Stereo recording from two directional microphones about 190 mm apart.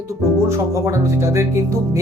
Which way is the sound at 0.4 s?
15° right (ahead or behind).